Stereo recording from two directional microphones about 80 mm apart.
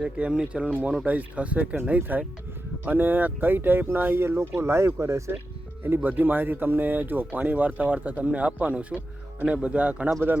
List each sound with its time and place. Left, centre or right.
0.0 s speech: centre; by 5.4 s right
5.8 s speech: right